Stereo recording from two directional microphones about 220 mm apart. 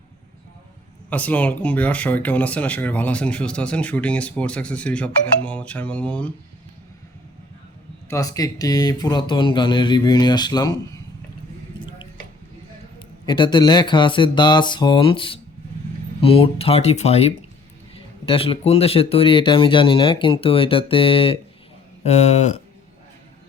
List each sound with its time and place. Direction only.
1.1 s speech: 5° left (ahead or behind)
8.1 s speech: 15° left (ahead or behind)
13.2 s speech: 20° left (ahead or behind)